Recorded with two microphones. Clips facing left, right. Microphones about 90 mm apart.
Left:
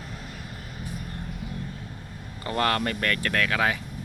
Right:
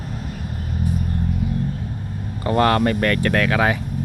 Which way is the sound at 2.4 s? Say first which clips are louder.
Right 8 dB; 25° right (ahead or behind).